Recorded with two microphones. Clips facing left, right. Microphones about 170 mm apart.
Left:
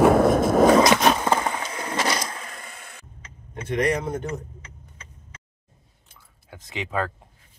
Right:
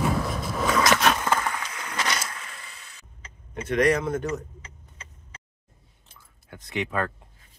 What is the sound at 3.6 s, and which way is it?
Speech, 20° left (ahead or behind).